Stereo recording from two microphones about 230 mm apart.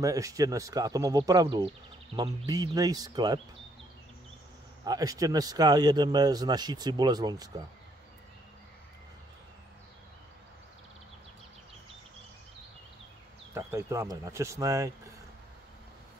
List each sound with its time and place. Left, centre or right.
0.0 s speech: centre
4.8 s speech: centre
13.5 s speech: centre